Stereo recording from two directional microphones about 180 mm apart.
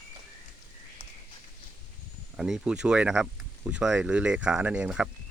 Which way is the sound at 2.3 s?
Centre (ahead or behind).